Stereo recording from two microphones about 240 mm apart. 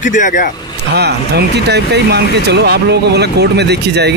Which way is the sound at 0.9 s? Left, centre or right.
Right.